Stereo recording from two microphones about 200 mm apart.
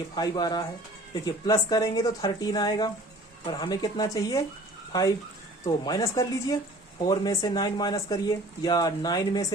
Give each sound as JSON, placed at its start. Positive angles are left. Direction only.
{"t": 0.2, "sound": "speech", "side_deg": 20}